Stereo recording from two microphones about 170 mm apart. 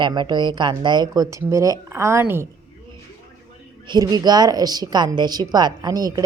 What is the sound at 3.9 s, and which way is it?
A woman's voice, 25° right (ahead or behind).